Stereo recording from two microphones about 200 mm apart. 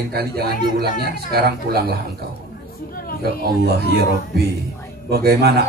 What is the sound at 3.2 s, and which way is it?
Speech, 55° right (ahead or behind).